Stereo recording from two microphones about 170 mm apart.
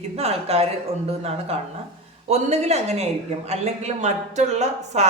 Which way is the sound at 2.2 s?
40° right (ahead or behind).